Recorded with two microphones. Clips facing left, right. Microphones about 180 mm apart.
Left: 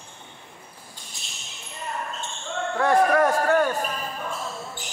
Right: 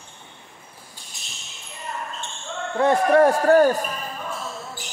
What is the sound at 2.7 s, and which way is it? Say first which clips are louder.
A man's voice: right 3 dB; 25° right (ahead or behind).